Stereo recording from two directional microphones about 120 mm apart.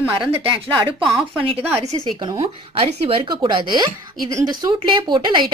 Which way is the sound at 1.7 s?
25° right (ahead or behind).